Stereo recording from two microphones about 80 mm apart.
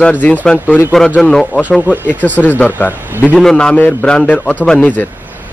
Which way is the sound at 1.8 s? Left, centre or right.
Left.